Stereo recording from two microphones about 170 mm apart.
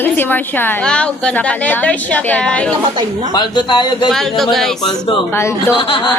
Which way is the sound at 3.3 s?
25° left (ahead or behind).